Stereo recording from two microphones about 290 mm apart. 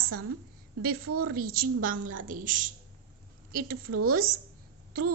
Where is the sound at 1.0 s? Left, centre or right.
Right.